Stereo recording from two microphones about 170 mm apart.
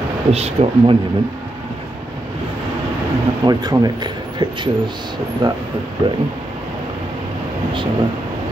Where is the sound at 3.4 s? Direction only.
25° right (ahead or behind).